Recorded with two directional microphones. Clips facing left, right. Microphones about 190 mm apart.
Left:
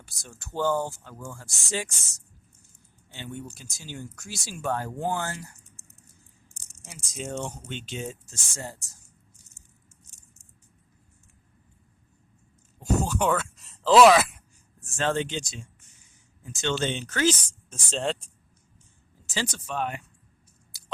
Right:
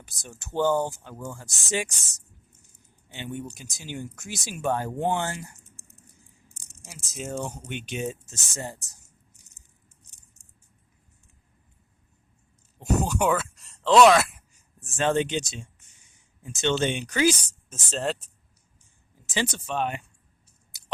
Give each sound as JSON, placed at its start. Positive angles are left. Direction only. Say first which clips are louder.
{"t": 0.0, "sound": "speech", "louder": "right 3 dB", "side_deg": -20}
{"t": 6.8, "sound": "speech", "louder": "even", "side_deg": 0}
{"t": 12.8, "sound": "a sound", "louder": "right 1 dB", "side_deg": -15}
{"t": 14.8, "sound": "speech", "louder": "right 3 dB", "side_deg": -15}
{"t": 17.7, "sound": "speech", "louder": "even", "side_deg": -5}
{"t": 19.2, "sound": "speech", "louder": "right 3 dB", "side_deg": -20}